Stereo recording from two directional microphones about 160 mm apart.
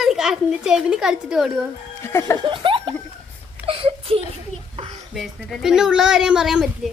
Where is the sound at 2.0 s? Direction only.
15° left (ahead or behind).